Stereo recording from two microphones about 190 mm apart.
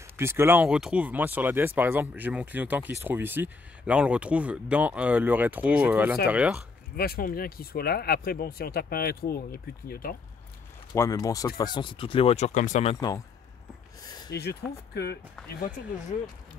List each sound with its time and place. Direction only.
0.2 s speech: 15° right (ahead or behind)
7.0 s speech: 50° left (ahead or behind)
10.9 s speech: 20° left (ahead or behind); by 12.9 s 40° left (ahead or behind)
14.0 s a sound: 20° left (ahead or behind)
14.3 s speech: 60° left (ahead or behind)